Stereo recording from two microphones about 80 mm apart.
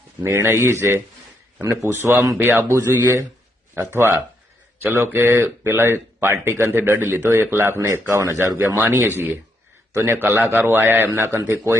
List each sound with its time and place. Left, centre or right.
0.3 s a man's voice: right